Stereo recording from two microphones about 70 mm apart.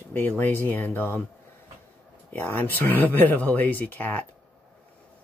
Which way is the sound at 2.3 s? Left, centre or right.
Left.